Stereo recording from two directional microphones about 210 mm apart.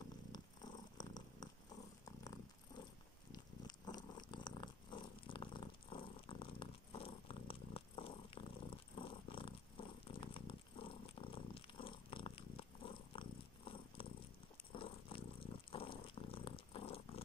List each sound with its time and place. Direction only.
0.9 s purr: 20° left (ahead or behind)
3.3 s cat: 20° left (ahead or behind)
14.7 s purr: 25° left (ahead or behind)